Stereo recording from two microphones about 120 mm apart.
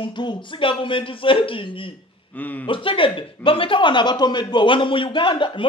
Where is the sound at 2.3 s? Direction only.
15° left (ahead or behind).